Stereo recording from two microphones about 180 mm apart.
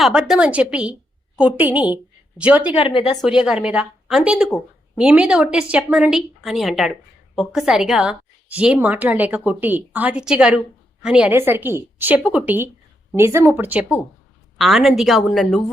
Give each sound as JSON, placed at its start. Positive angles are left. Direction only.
{"t": 0.0, "sound": "a woman's voice", "side_deg": -5}
{"t": 2.7, "sound": "speech", "side_deg": 35}
{"t": 3.2, "sound": "a woman's voice", "side_deg": -5}